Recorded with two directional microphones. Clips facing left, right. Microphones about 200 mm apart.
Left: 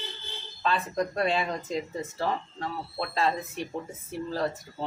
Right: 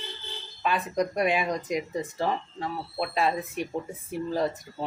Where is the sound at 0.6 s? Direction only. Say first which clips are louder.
Right 1 dB; 15° right (ahead or behind).